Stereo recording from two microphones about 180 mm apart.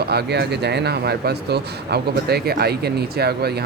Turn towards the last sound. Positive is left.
turn(degrees=-60)  # may be behind; listen again after turning